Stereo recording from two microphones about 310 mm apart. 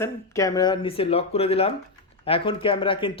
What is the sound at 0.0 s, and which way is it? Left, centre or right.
Speech, centre.